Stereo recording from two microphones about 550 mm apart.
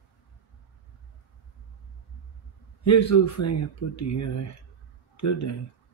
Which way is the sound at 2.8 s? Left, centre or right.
Left.